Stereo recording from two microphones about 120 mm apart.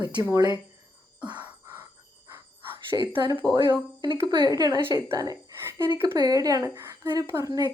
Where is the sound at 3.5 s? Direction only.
40° right (ahead or behind); by 5.9 s 20° right (ahead or behind).